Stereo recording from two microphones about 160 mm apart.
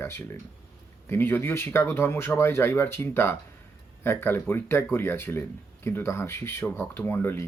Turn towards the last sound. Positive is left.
turn(degrees=15)  # may be behind; listen again after turning